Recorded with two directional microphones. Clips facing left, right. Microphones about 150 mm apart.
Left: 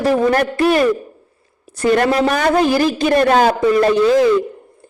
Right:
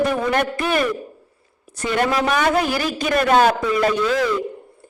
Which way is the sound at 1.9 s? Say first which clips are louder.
Left 6 dB; 40° left (ahead or behind).